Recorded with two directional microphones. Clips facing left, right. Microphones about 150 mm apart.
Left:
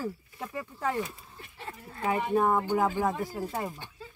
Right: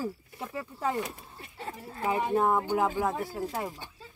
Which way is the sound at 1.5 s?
35° right (ahead or behind).